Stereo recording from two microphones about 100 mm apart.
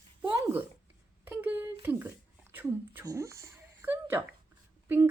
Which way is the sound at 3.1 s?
30° right (ahead or behind).